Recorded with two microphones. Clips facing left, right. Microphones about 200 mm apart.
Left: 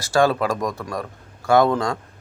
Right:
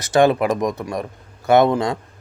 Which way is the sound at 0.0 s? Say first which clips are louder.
Right 3 dB; 20° right (ahead or behind).